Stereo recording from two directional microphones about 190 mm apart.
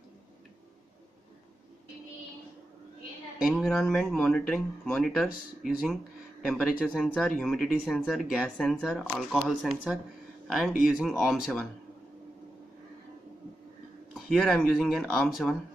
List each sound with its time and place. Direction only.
3.4 s speech: centre (ahead or behind)
14.1 s speech: centre (ahead or behind)